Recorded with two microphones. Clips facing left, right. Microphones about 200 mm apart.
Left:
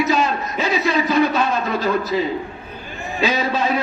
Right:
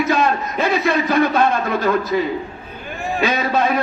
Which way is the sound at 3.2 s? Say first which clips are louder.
Right 1 dB; 55° right (ahead or behind).